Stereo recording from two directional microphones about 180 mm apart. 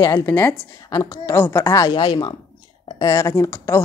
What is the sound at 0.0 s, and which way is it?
A woman's voice, 15° left (ahead or behind).